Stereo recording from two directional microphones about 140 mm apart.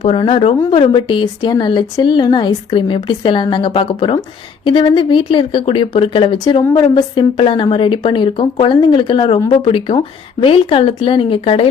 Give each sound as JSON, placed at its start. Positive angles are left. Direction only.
{"t": 0.0, "sound": "a woman's voice", "side_deg": 40}